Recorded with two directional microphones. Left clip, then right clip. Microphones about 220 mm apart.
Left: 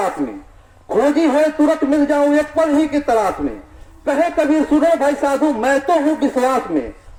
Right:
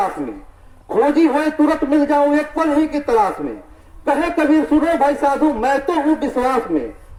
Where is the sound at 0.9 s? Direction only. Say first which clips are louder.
Even; 35° left (ahead or behind).